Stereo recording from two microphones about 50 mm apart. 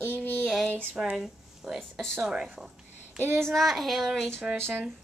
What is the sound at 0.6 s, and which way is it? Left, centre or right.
Speech, left.